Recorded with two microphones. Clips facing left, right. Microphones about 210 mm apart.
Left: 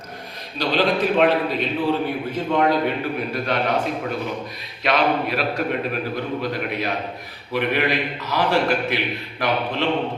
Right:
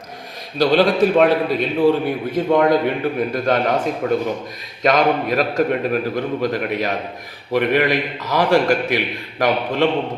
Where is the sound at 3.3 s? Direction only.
45° right (ahead or behind).